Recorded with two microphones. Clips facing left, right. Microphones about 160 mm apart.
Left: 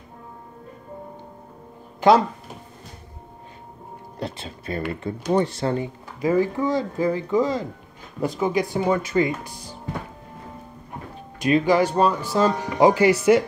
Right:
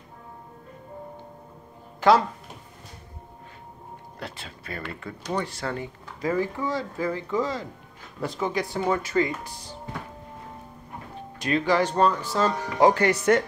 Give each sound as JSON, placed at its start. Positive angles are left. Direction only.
{"t": 2.0, "sound": "a sound", "side_deg": 20}
{"t": 4.2, "sound": "speech", "side_deg": 25}
{"t": 11.3, "sound": "speech", "side_deg": 15}